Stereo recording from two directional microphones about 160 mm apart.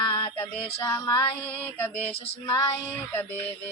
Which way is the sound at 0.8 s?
15° left (ahead or behind).